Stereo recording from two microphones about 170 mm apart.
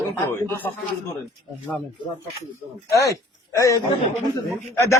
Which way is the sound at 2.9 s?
20° left (ahead or behind).